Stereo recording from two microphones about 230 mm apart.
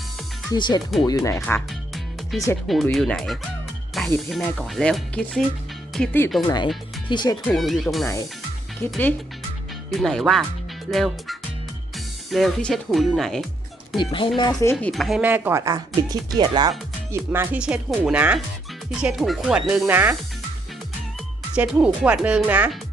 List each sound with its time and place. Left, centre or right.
0.5 s speech: centre
2.3 s speech: centre
7.4 s speech: centre
14.0 s speech: left; by 20.1 s centre
21.5 s speech: centre